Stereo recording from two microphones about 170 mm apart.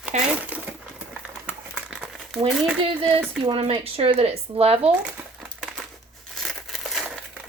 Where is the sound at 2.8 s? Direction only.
35° right (ahead or behind).